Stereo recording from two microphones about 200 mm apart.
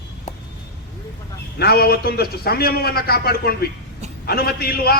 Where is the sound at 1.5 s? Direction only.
50° left (ahead or behind).